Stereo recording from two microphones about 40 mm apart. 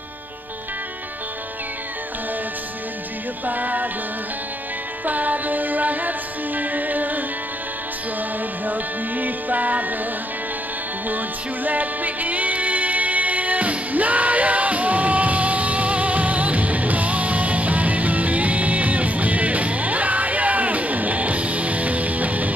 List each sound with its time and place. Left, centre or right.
3.4 s music: right
5.0 s music: right
8.6 s music: right
11.1 s music: right